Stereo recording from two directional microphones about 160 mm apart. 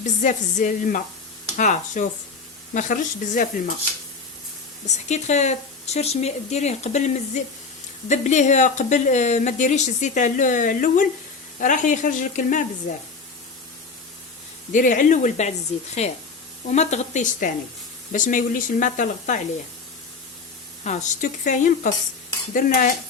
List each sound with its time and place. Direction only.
0.0 s speech: 50° left (ahead or behind)
5.0 s speech: 45° left (ahead or behind)
14.7 s speech: 55° left (ahead or behind)
20.8 s speech: 50° left (ahead or behind)